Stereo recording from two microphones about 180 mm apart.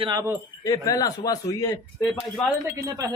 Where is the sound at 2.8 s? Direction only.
20° right (ahead or behind).